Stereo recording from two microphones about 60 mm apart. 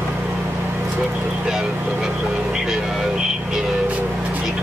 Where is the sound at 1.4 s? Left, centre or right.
Centre.